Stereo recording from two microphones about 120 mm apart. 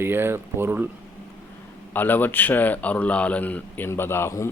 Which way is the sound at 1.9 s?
15° left (ahead or behind).